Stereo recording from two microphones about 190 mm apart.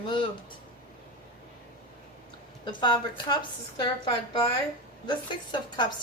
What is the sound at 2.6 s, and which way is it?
A woman's voice, 25° left (ahead or behind).